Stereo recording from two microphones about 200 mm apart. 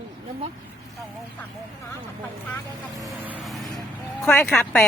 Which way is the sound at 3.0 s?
10° right (ahead or behind).